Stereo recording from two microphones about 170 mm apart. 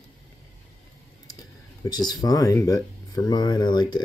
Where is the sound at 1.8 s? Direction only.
25° left (ahead or behind).